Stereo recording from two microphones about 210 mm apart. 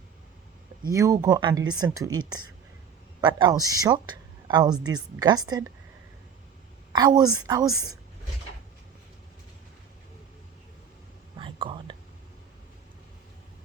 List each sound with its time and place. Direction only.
0.9 s a woman's voice: 15° right (ahead or behind)
6.9 s speech: 20° right (ahead or behind)
11.3 s whispering: 25° right (ahead or behind)